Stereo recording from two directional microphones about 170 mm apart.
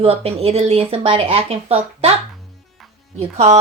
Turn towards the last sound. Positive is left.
turn(degrees=-40)  # may be behind; listen again after turning